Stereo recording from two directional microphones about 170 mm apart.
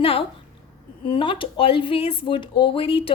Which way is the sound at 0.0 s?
35° left (ahead or behind).